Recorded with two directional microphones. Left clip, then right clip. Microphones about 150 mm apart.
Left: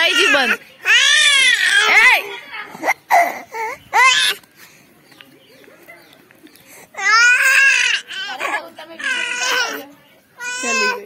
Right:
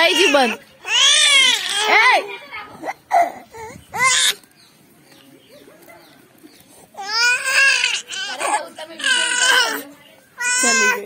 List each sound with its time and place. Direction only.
0.1 s baby cry: 25° left (ahead or behind)
2.0 s children playing: 10° right (ahead or behind)
2.8 s a sound: 40° left (ahead or behind)
3.3 s baby cry: 40° left (ahead or behind)
7.0 s baby cry: 20° left (ahead or behind)
7.9 s baby cry: centre (ahead or behind)
9.3 s baby cry: 15° right (ahead or behind)
10.3 s cat: 25° right (ahead or behind)